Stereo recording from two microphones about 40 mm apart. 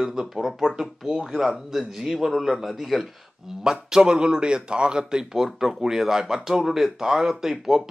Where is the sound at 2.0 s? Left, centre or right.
Centre.